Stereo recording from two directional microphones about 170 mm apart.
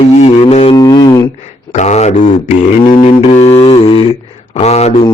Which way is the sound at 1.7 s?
40° left (ahead or behind).